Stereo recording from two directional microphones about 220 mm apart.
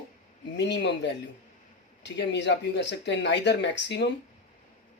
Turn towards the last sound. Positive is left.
turn(degrees=50)  # may be behind; listen again after turning